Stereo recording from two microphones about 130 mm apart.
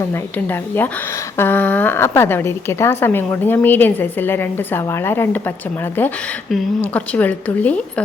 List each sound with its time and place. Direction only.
0.0 s a woman's voice: 15° left (ahead or behind)